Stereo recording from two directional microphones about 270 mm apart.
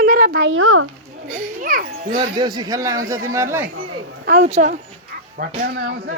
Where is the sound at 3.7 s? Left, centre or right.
Right.